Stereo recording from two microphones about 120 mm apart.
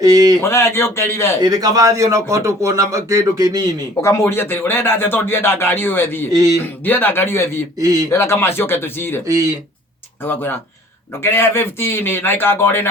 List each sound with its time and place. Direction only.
0.0 s speech: 30° right (ahead or behind)
0.4 s a man's voice: 20° left (ahead or behind)
1.4 s a man's voice: 30° right (ahead or behind)
4.0 s speech: 20° left (ahead or behind)
7.8 s a man's voice: 30° right (ahead or behind)
8.1 s a man's voice: 20° left (ahead or behind)
10.2 s a man's voice: 20° left (ahead or behind)